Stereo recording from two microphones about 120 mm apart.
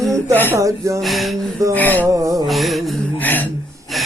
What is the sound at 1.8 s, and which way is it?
Speech, 15° left (ahead or behind).